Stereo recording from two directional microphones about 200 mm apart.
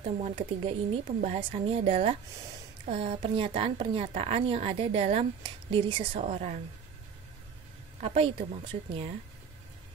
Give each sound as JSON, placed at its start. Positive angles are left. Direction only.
{"t": 0.0, "sound": "a woman's voice", "side_deg": -35}
{"t": 8.0, "sound": "a woman's voice", "side_deg": -30}